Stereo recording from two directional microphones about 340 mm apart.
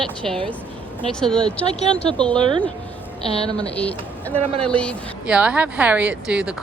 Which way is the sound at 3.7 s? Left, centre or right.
Centre.